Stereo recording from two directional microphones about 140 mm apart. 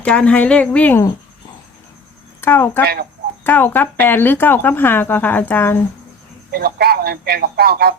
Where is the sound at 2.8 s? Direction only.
90° right.